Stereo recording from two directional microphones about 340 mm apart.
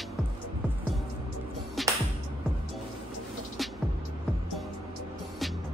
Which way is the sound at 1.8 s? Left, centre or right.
Centre.